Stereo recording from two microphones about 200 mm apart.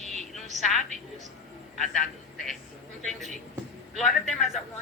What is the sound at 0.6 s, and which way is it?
A man's voice, centre (ahead or behind).